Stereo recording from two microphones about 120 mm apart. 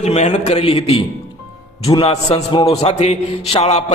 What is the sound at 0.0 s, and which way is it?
A man's voice, 70° left (ahead or behind).